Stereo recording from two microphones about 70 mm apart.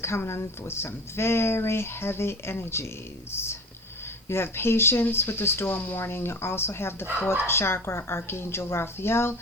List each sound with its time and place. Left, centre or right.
0.0 s speech: left